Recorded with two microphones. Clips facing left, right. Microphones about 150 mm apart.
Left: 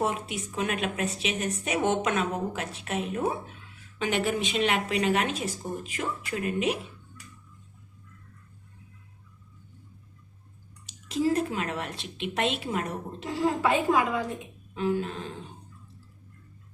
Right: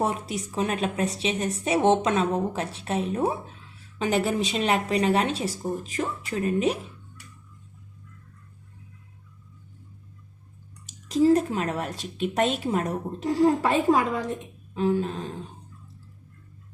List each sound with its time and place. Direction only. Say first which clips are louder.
0.0 s a woman's voice: right 2 dB; 35° right (ahead or behind)
10.8 s a woman's voice: right 6 dB; 40° right (ahead or behind)